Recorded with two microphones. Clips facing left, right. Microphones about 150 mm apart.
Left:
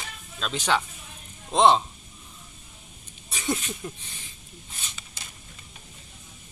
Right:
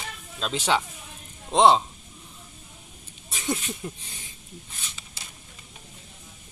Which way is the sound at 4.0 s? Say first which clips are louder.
Right 1 dB; 35° right (ahead or behind).